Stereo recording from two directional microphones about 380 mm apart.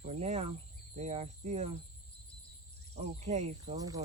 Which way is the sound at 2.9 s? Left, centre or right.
Centre.